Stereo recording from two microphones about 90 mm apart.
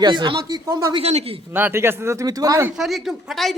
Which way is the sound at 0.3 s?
40° right (ahead or behind).